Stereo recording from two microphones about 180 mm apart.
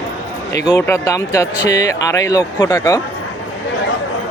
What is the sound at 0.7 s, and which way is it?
Speech, 15° left (ahead or behind).